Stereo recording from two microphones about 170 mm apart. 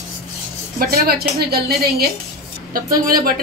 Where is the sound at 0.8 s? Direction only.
60° right (ahead or behind).